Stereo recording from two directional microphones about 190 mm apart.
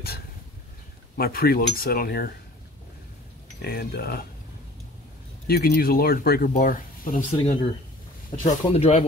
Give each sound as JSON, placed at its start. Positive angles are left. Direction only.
{"t": 1.1, "sound": "speech", "side_deg": 50}
{"t": 3.6, "sound": "speech", "side_deg": 55}
{"t": 5.5, "sound": "speech", "side_deg": 50}
{"t": 8.6, "sound": "speech", "side_deg": 30}